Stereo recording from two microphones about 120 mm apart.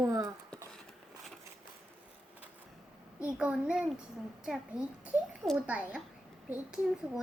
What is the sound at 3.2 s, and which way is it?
A child's voice, 10° right (ahead or behind).